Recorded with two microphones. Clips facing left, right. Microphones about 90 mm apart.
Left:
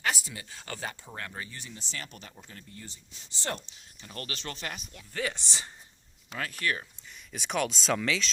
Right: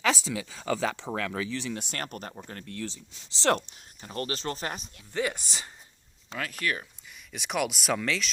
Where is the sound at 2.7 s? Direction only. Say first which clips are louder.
Right 11 dB; 90° right.